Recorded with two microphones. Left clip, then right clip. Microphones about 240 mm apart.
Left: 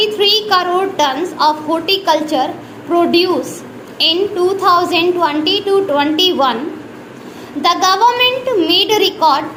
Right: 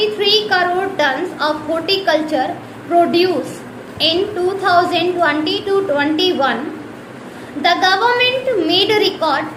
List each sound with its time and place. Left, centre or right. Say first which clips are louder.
0.0 s a woman's voice: left 2 dB; left
7.6 s a woman's voice: left 2 dB; left